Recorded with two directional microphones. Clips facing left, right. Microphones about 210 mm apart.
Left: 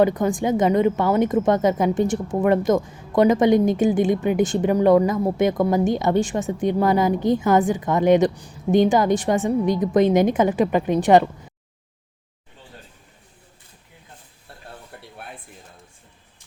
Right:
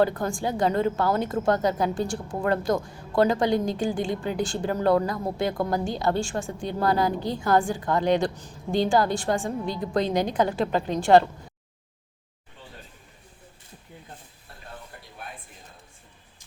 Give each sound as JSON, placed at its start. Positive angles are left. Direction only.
{"t": 0.0, "sound": "a woman's voice", "side_deg": 20}